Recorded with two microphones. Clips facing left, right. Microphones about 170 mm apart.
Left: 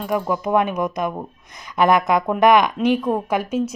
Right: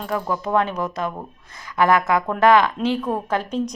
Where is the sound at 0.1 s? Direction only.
15° left (ahead or behind).